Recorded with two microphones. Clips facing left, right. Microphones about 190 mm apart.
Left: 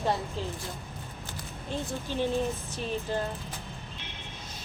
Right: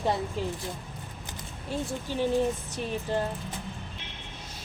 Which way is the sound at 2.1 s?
10° right (ahead or behind).